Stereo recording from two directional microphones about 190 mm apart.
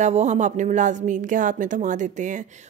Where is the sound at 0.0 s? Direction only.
35° right (ahead or behind).